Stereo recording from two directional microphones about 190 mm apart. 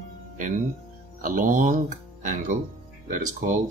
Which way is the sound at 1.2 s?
45° right (ahead or behind).